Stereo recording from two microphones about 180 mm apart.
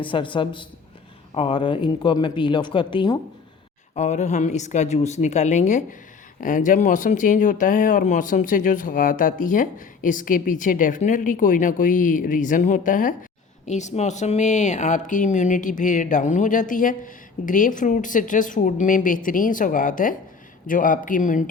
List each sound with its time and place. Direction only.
0.0 s speech: 30° left (ahead or behind)
3.9 s a woman's voice: 40° left (ahead or behind)